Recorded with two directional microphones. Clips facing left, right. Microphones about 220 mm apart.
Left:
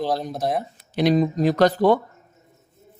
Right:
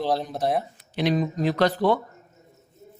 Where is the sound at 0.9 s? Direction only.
40° left (ahead or behind).